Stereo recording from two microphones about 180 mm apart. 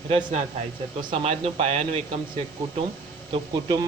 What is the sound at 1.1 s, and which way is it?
Speech, 35° right (ahead or behind).